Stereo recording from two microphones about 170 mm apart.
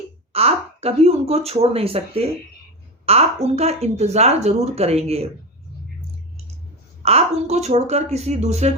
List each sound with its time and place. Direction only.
0.3 s speech: 35° right (ahead or behind)
7.0 s speech: 40° right (ahead or behind)